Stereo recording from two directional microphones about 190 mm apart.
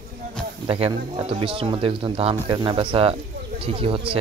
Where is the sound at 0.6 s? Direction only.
25° right (ahead or behind).